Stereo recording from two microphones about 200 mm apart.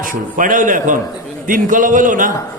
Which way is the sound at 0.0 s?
40° right (ahead or behind).